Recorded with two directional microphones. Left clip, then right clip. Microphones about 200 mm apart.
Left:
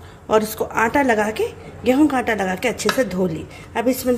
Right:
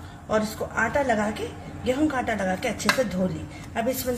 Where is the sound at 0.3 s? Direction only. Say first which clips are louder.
Left 7 dB; 50° left (ahead or behind).